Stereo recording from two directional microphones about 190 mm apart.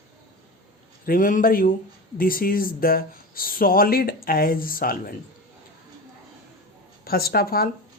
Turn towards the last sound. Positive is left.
turn(degrees=50)  # may be behind; listen again after turning